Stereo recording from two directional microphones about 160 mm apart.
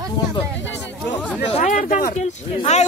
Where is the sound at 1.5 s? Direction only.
50° left (ahead or behind).